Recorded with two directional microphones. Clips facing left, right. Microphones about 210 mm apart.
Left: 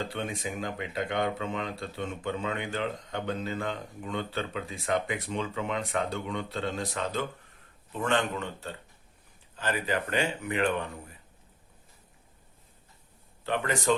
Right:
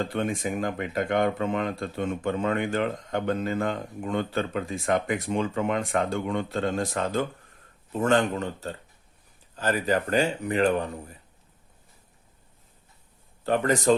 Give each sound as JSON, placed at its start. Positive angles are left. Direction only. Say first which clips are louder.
{"t": 0.1, "sound": "speech", "louder": "right 6 dB", "side_deg": -50}
{"t": 13.4, "sound": "speech", "louder": "right 6 dB", "side_deg": -40}